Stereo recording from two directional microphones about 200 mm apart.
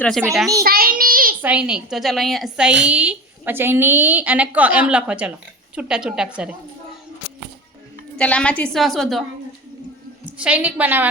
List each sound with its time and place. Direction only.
0.6 s child singing: 50° right (ahead or behind)
1.4 s a woman's voice: 5° right (ahead or behind)
8.2 s a woman's voice: 5° left (ahead or behind)
10.3 s a woman's voice: 5° right (ahead or behind)